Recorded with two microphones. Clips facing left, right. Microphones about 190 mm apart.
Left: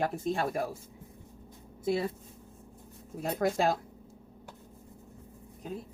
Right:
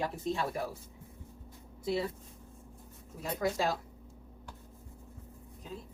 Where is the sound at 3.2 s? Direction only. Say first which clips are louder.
Left 4 dB; 55° left (ahead or behind).